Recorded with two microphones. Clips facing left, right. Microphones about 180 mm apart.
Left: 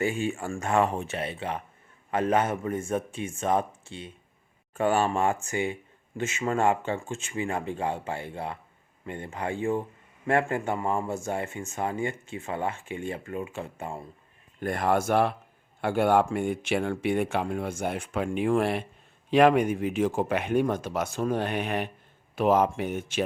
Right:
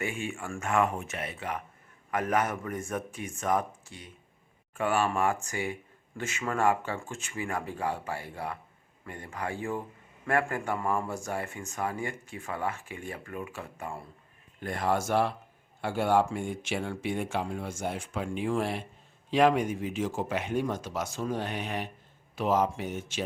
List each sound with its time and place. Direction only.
0.0 s speech: 35° left (ahead or behind)
14.6 s speech: 55° left (ahead or behind)